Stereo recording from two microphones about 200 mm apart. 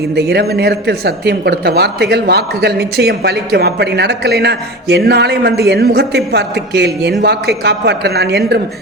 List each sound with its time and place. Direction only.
0.2 s speech: 55° right (ahead or behind)